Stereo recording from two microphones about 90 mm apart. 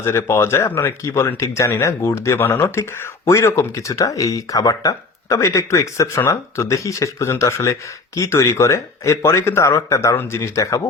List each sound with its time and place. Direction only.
0.0 s speech: 30° left (ahead or behind)